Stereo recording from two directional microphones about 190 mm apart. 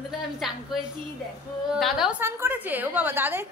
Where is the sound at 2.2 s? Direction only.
10° right (ahead or behind).